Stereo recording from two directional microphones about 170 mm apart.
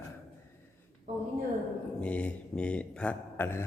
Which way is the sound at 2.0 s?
5° left (ahead or behind).